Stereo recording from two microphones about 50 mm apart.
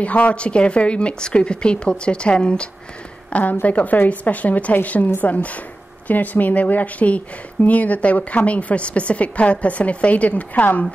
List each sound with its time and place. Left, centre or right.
0.0 s speech: left